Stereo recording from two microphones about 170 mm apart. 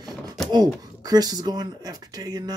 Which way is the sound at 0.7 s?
20° right (ahead or behind).